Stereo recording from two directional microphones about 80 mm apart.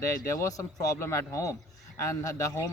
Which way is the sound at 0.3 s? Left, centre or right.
Left.